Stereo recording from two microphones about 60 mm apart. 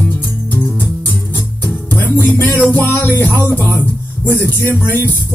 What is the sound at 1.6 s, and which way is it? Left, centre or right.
Music, left.